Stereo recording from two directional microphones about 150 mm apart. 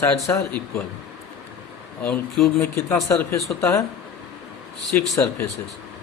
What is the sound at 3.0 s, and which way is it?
Speech, 20° left (ahead or behind).